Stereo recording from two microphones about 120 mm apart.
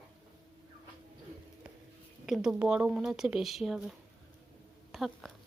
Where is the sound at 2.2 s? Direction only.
5° right (ahead or behind).